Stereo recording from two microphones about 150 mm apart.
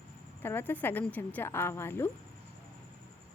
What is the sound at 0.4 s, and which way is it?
Speech, 15° left (ahead or behind).